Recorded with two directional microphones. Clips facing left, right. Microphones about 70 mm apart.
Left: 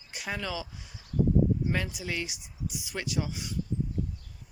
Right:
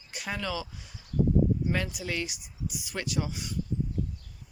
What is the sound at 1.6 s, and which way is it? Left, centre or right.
Speech, centre.